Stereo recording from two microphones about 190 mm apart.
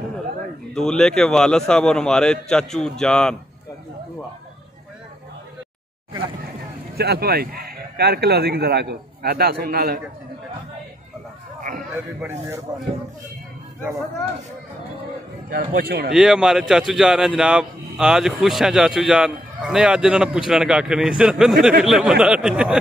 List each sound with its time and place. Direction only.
0.7 s a man's voice: 5° left (ahead or behind)
7.0 s speech: 55° right (ahead or behind)
12.2 s speech: 15° right (ahead or behind)
15.5 s speech: 55° right (ahead or behind)
16.1 s a man's voice: 5° right (ahead or behind)